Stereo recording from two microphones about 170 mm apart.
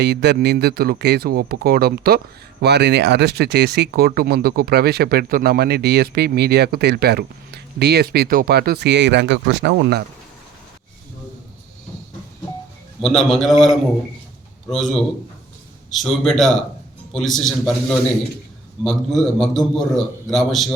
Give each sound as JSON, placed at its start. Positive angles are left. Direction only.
{"t": 0.0, "sound": "speech", "side_deg": -80}
{"t": 13.0, "sound": "a man's voice", "side_deg": 0}